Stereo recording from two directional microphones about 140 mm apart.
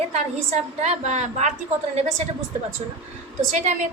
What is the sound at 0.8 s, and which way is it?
Speech, 55° right (ahead or behind).